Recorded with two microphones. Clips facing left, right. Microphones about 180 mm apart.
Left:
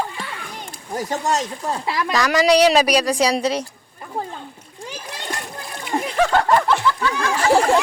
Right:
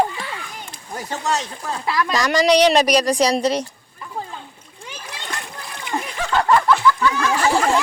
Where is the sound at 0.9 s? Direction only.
40° left (ahead or behind).